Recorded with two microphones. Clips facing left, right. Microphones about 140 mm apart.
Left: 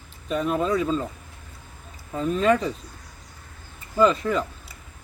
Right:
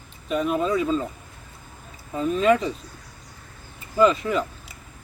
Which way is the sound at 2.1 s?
Centre (ahead or behind).